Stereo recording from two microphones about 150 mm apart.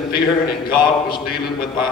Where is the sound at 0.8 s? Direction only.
30° left (ahead or behind).